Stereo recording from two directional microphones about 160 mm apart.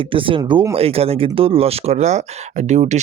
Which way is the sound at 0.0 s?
35° right (ahead or behind).